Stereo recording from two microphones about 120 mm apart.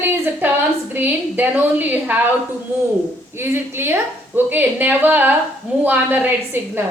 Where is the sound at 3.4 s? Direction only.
20° right (ahead or behind).